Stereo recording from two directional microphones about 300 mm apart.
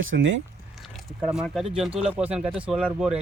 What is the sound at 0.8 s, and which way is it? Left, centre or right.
Speech, centre.